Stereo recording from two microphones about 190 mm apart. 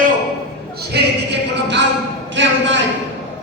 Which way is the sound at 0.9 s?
60° right (ahead or behind).